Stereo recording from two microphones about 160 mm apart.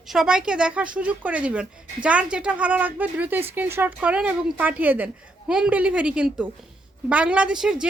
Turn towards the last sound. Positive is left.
turn(degrees=-5)  # may be behind; listen again after turning